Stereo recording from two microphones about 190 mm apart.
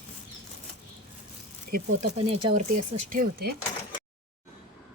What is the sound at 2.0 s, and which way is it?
Speech, 35° right (ahead or behind).